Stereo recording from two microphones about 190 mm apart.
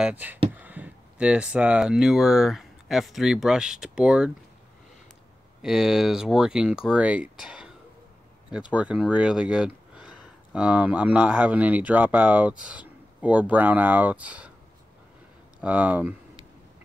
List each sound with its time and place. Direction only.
0.0 s speech: 10° right (ahead or behind)
5.6 s speech: 5° right (ahead or behind)
15.6 s speech: 5° right (ahead or behind)